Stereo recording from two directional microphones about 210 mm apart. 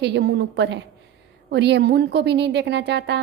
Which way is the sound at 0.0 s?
55° right (ahead or behind).